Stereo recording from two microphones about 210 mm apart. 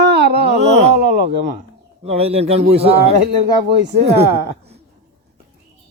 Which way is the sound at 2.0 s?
30° right (ahead or behind).